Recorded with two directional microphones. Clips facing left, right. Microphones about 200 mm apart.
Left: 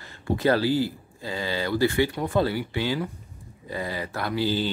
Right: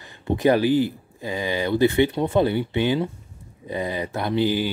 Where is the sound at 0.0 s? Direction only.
15° right (ahead or behind).